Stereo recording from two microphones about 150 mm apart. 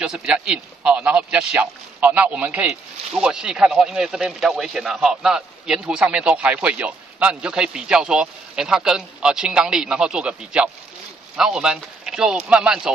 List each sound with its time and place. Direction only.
0.0 s a man's voice: 5° right (ahead or behind)